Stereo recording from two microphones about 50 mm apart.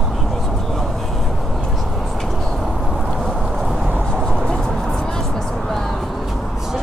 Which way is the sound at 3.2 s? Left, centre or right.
Centre.